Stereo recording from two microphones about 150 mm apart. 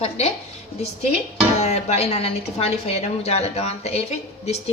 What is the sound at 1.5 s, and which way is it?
A woman's voice, 45° left (ahead or behind).